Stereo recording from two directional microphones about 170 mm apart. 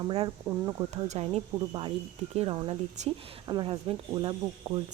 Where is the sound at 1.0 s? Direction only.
40° right (ahead or behind).